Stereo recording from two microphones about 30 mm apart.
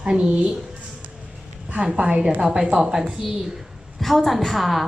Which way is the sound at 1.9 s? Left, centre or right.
Right.